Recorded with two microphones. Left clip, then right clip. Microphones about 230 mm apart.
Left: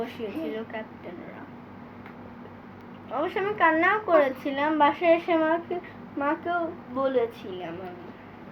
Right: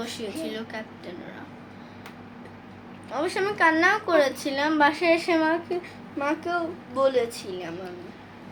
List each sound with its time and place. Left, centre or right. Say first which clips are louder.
0.3 s a woman's voice: even; centre
0.5 s a woman's voice: even; right
3.1 s a woman's voice: right 1 dB; right